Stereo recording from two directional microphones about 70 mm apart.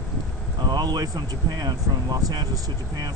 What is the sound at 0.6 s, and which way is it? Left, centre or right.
Speech, right.